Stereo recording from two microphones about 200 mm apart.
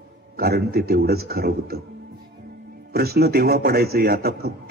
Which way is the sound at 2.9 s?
50° right (ahead or behind).